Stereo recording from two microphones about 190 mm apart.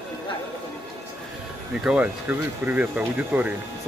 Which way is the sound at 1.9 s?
10° right (ahead or behind).